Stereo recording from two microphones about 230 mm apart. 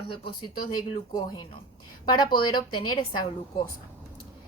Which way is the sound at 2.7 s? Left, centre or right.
Centre.